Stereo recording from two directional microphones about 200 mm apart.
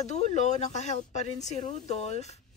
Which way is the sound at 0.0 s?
35° left (ahead or behind).